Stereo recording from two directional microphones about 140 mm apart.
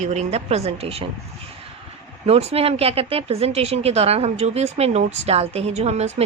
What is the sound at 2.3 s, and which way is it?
A woman's voice, 45° right (ahead or behind).